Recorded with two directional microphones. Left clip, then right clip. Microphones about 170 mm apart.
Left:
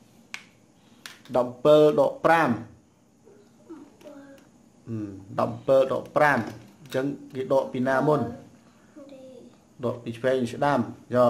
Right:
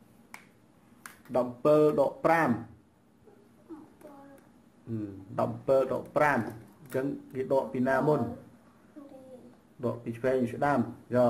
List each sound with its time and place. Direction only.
1.3 s speech: 30° left (ahead or behind)
4.8 s speech: 30° left (ahead or behind)
9.8 s speech: 30° left (ahead or behind)